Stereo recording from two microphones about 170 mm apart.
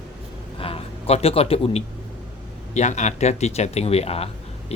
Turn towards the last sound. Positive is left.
turn(degrees=35)  # may be behind; listen again after turning